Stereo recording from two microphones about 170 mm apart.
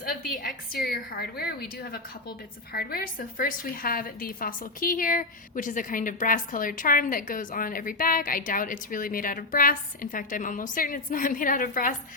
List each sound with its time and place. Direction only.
0.0 s a woman's voice: 55° left (ahead or behind)